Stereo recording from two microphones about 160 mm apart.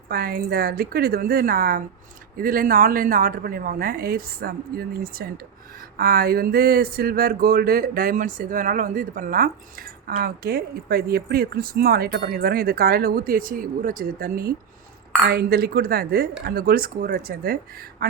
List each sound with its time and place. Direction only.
0.1 s a woman's voice: 70° right (ahead or behind)
15.3 s speech: 90° right; by 18.1 s 70° right (ahead or behind)